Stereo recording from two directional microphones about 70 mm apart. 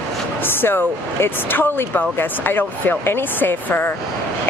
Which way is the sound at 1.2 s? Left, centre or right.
Left.